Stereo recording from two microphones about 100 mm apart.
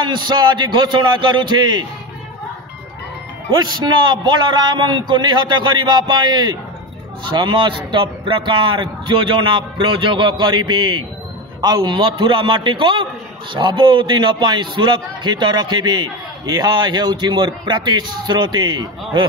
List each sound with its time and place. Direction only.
0.0 s a man's voice: 50° right (ahead or behind)
3.5 s a man's voice: 45° right (ahead or behind)